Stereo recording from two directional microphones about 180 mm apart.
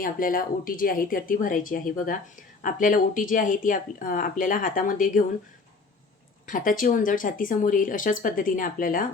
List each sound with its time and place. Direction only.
0.0 s a woman's voice: 50° left (ahead or behind)
6.5 s a woman's voice: 50° left (ahead or behind)